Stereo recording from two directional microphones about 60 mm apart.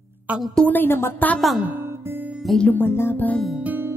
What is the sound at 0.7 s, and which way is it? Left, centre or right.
Speech, left.